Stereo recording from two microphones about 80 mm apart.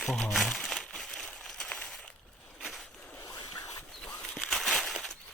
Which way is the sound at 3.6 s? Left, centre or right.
Left.